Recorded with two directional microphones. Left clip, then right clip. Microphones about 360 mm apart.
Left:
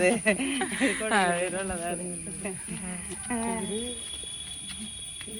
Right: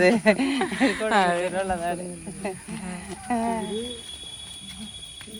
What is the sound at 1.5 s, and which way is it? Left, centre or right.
Speech, right.